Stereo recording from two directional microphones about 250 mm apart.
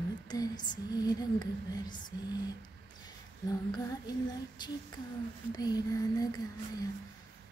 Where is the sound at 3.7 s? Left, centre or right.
Centre.